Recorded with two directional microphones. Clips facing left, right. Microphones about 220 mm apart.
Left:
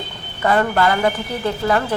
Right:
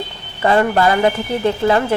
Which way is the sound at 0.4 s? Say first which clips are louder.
Right 3 dB; 25° right (ahead or behind).